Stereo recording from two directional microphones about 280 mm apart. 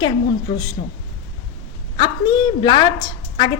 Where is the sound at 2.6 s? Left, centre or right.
Centre.